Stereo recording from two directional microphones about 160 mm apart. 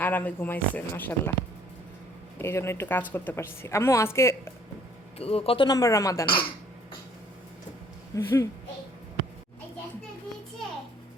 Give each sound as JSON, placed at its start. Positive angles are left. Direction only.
{"t": 0.0, "sound": "a woman's voice", "side_deg": 10}
{"t": 2.4, "sound": "a woman's voice", "side_deg": 15}
{"t": 5.1, "sound": "speech", "side_deg": 40}
{"t": 5.6, "sound": "speech", "side_deg": 20}
{"t": 8.1, "sound": "a woman's voice", "side_deg": 20}